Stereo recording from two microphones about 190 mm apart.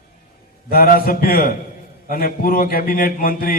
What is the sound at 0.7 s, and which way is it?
A man's voice, 50° left (ahead or behind).